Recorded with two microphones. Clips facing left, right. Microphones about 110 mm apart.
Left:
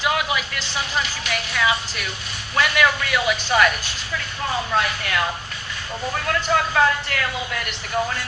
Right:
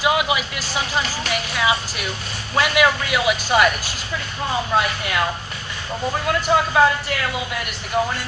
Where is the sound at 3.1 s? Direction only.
5° right (ahead or behind).